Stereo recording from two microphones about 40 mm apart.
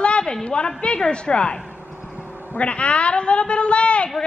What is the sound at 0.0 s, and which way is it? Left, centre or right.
A woman's voice, left.